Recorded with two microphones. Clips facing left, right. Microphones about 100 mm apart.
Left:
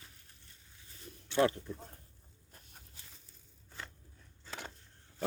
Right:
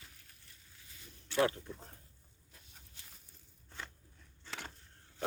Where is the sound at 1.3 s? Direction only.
20° left (ahead or behind).